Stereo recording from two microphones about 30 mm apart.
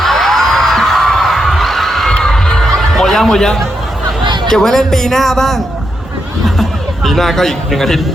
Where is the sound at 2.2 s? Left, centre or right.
Left.